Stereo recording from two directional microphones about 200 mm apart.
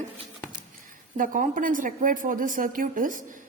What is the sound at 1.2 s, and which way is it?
A woman's voice, 40° right (ahead or behind).